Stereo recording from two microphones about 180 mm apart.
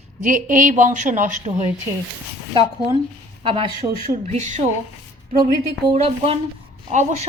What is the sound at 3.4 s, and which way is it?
Speech, 30° right (ahead or behind).